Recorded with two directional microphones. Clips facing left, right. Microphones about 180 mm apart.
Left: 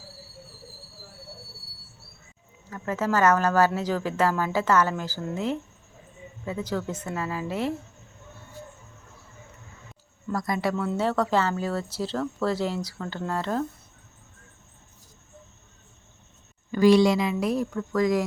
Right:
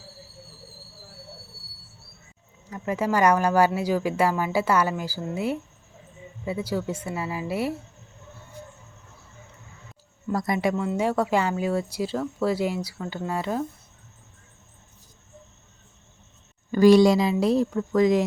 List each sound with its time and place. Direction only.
2.6 s speech: 15° right (ahead or behind)
10.3 s speech: 25° right (ahead or behind)
16.7 s speech: 40° right (ahead or behind); by 18.2 s 25° right (ahead or behind)